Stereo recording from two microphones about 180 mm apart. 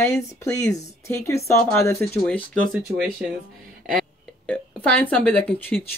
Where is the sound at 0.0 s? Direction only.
15° left (ahead or behind).